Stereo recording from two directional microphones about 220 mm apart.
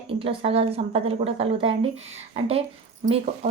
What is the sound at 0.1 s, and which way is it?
A woman's voice, 25° right (ahead or behind).